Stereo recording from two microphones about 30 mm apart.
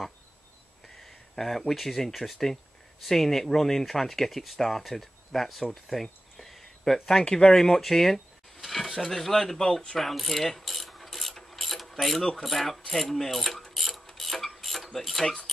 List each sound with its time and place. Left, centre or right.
1.0 s speech: centre
5.9 s a sound: centre
7.2 s speech: left
7.5 s speech: centre
9.9 s mechanisms: centre
14.6 s a sound: centre
14.9 s mechanisms: centre